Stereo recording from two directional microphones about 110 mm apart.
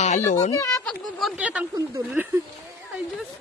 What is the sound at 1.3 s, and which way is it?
Speech, 10° right (ahead or behind).